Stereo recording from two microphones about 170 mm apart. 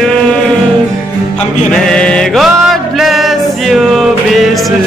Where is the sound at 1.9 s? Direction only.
5° left (ahead or behind).